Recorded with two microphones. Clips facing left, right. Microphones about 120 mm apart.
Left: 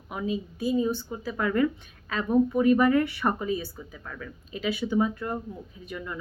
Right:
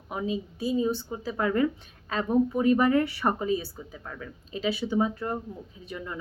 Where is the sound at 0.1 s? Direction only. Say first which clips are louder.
Even; 30° right (ahead or behind).